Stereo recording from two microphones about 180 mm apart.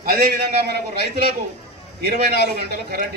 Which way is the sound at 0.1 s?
60° right (ahead or behind).